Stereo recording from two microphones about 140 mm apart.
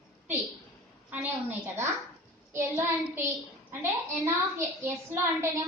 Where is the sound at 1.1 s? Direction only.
15° right (ahead or behind).